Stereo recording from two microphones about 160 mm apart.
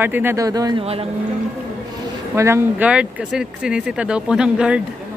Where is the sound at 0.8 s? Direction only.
40° right (ahead or behind).